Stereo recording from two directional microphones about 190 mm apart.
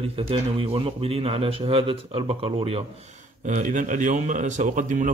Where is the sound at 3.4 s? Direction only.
40° right (ahead or behind).